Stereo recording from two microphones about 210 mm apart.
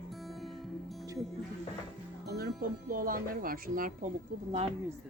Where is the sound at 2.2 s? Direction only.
50° right (ahead or behind).